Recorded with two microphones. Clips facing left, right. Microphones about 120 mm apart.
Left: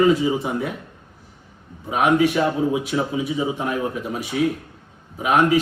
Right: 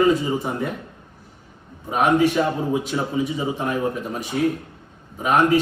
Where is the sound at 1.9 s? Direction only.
5° left (ahead or behind).